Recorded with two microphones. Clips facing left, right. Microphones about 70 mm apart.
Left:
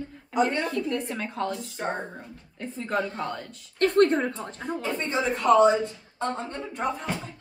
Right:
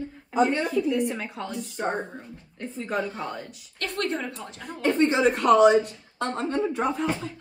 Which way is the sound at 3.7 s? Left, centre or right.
Left.